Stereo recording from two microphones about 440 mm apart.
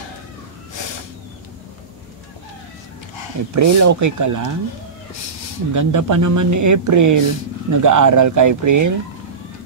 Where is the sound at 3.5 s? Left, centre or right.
Right.